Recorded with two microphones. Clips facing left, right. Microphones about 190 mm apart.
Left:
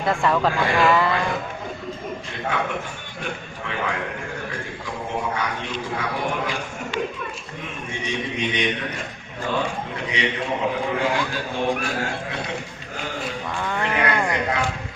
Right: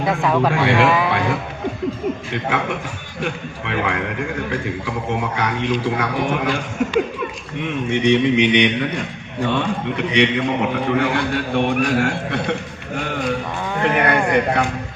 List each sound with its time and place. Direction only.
0.1 s speech: 5° right (ahead or behind)
0.6 s a man's voice: 70° right (ahead or behind)
1.0 s a sound: 75° right (ahead or behind)
3.7 s a man's voice: 70° right (ahead or behind)
5.4 s a man's voice: 70° right (ahead or behind)
7.6 s a man's voice: 70° right (ahead or behind)
13.8 s speech: 60° right (ahead or behind)